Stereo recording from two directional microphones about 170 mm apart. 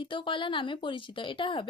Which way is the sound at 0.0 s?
30° left (ahead or behind).